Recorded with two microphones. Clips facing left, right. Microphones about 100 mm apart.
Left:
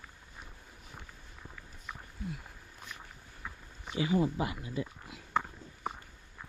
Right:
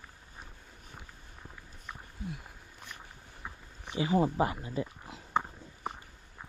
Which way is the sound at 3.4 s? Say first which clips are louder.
Even; 20° right (ahead or behind).